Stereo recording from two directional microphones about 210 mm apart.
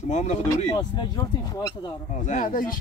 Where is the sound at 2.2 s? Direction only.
40° left (ahead or behind).